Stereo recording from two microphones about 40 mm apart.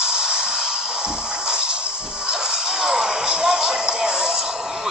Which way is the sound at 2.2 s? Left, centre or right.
Centre.